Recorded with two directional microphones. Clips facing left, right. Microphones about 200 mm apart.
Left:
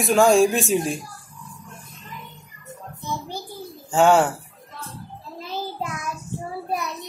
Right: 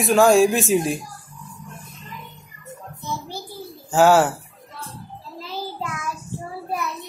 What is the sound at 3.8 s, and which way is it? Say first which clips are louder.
Speech: right 1 dB; 5° right (ahead or behind).